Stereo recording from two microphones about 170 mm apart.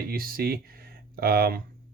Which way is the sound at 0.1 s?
60° right (ahead or behind).